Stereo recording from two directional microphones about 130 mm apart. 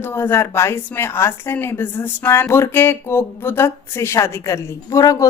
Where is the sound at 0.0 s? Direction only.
15° left (ahead or behind).